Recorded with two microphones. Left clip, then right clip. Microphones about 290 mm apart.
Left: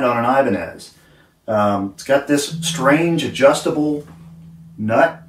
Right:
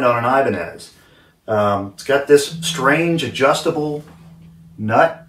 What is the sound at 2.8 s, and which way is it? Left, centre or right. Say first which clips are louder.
Speech: left 1 dB; centre.